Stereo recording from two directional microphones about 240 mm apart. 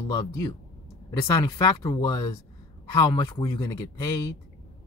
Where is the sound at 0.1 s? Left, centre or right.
Centre.